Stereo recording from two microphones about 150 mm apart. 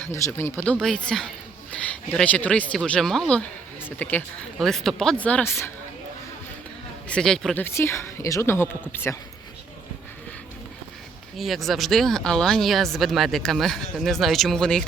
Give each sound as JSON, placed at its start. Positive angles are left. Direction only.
{"t": 0.1, "sound": "speech", "side_deg": 15}
{"t": 7.1, "sound": "speech", "side_deg": 5}
{"t": 7.6, "sound": "speech", "side_deg": 15}
{"t": 11.3, "sound": "speech", "side_deg": 0}